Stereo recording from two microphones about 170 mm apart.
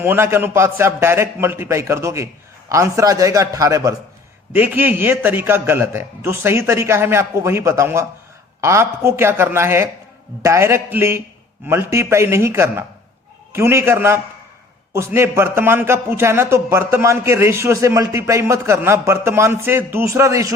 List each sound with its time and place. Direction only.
0.0 s a man's voice: 15° right (ahead or behind)